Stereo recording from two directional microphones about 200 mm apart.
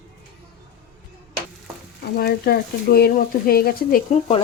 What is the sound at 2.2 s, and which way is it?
Speech, 50° left (ahead or behind).